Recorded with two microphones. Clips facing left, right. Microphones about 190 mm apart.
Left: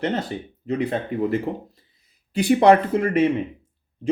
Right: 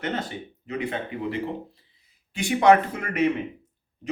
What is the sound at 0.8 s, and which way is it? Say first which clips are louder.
Speech: left 5 dB; 35° left (ahead or behind).